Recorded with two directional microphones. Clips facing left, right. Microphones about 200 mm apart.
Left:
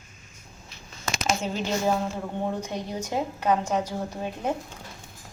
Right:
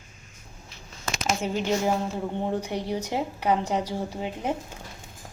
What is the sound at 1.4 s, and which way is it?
Speech, 15° right (ahead or behind).